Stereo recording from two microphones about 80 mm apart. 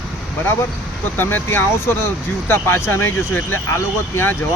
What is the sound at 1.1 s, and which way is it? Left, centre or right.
Speech, left.